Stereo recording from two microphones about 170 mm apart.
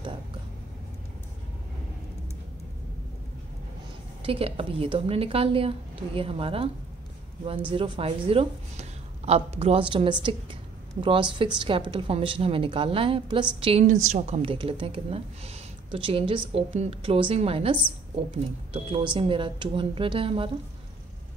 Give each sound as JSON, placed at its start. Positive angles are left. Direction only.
{"t": 4.2, "sound": "a woman's voice", "side_deg": -35}